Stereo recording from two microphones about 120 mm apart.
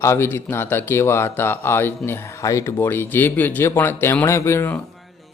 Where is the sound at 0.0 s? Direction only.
20° left (ahead or behind).